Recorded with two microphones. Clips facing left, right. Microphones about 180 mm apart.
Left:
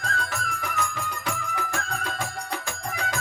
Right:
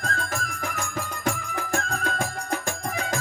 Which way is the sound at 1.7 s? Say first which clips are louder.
Right 4 dB; 45° right (ahead or behind).